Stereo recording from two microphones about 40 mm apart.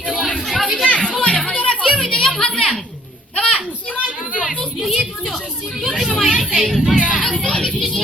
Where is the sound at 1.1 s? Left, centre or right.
Left.